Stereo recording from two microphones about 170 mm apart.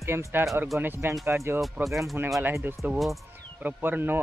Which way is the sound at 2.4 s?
15° right (ahead or behind).